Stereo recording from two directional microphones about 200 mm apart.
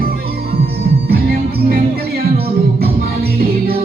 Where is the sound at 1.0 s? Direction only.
50° right (ahead or behind).